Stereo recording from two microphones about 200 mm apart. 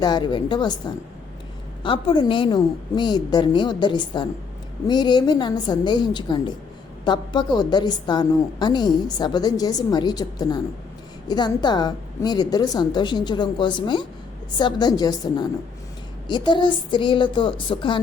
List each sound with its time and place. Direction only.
0.0 s a woman's voice: 20° left (ahead or behind)
1.8 s a woman's voice: 25° left (ahead or behind)